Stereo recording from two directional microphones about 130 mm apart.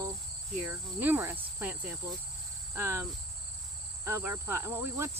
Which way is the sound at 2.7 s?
20° right (ahead or behind).